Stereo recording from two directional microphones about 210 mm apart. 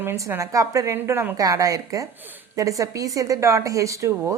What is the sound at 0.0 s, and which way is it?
A woman's voice, 10° right (ahead or behind).